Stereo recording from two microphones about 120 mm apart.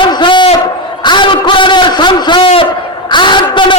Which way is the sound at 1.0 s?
40° left (ahead or behind).